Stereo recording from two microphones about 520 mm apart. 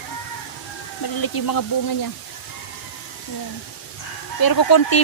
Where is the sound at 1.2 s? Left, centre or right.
Left.